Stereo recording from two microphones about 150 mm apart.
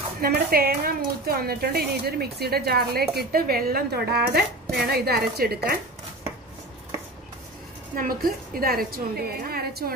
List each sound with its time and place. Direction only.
0.2 s speech: 85° right
7.9 s a woman's voice: 75° right (ahead or behind)